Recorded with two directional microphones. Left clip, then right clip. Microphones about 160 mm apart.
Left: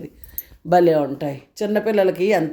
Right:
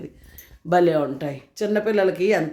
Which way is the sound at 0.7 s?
25° left (ahead or behind).